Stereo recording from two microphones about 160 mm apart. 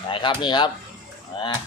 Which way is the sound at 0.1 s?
30° left (ahead or behind).